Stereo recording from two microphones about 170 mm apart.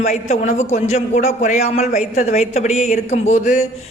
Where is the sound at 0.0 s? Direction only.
40° left (ahead or behind).